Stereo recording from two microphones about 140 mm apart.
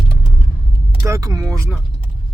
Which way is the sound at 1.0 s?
25° right (ahead or behind).